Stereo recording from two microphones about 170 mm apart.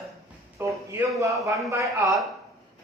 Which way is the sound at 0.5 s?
15° right (ahead or behind).